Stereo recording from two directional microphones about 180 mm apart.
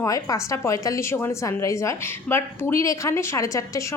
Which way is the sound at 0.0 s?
20° left (ahead or behind).